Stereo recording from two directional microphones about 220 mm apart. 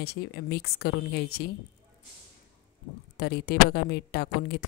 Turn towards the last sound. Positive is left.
turn(degrees=45)  # may be behind; listen again after turning